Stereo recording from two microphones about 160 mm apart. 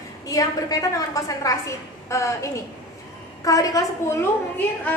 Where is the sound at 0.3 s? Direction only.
20° left (ahead or behind).